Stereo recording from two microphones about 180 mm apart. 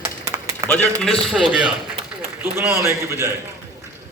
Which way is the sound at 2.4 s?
15° right (ahead or behind).